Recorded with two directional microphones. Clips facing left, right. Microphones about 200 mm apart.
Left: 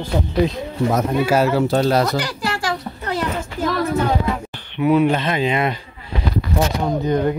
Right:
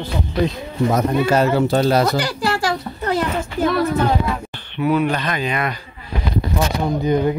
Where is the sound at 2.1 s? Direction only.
30° right (ahead or behind).